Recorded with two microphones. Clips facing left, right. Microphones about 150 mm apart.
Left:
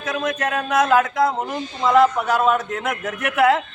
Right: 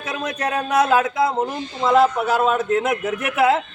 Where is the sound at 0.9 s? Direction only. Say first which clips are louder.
Left 1 dB; 10° right (ahead or behind).